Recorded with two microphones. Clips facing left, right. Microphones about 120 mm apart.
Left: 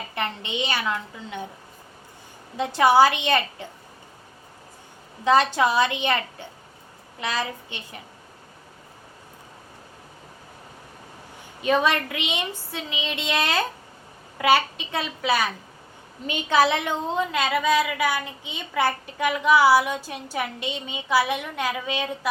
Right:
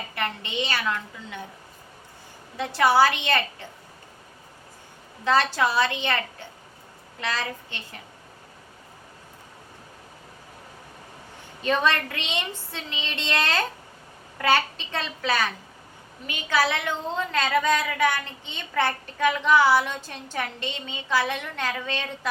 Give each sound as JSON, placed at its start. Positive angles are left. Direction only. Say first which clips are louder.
{"t": 0.1, "sound": "a woman's voice", "louder": "left 1 dB", "side_deg": 20}
{"t": 2.6, "sound": "a woman's voice", "louder": "left 3 dB", "side_deg": 15}
{"t": 5.2, "sound": "a woman's voice", "louder": "left 3 dB", "side_deg": 15}
{"t": 7.2, "sound": "a woman's voice", "louder": "left 2 dB", "side_deg": 15}
{"t": 11.6, "sound": "a woman's voice", "louder": "left 2 dB", "side_deg": 10}